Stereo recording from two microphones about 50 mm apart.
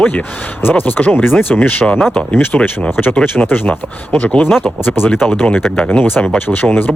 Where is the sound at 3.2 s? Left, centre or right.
Left.